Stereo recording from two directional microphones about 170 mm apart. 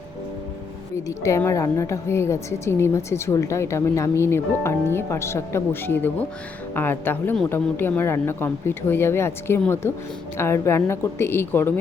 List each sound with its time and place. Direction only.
1.0 s a woman's voice: 15° left (ahead or behind)